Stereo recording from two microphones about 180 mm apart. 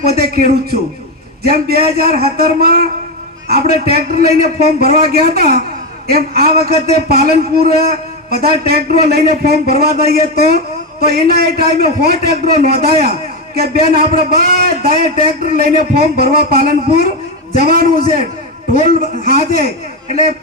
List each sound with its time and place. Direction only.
0.1 s a man's voice: 60° right (ahead or behind)
7.6 s a man's voice: 40° left (ahead or behind)
8.3 s a man's voice: 60° right (ahead or behind)